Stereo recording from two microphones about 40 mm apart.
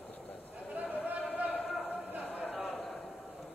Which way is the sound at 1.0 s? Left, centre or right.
Right.